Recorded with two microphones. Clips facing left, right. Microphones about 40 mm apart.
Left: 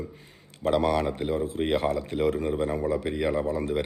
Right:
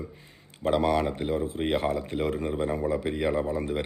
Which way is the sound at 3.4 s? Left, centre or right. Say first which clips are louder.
Left 1 dB; right.